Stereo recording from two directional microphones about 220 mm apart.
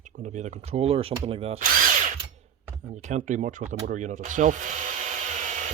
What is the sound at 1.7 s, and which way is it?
Drill, 40° right (ahead or behind).